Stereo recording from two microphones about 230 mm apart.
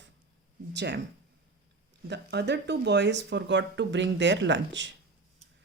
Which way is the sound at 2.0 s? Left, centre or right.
Right.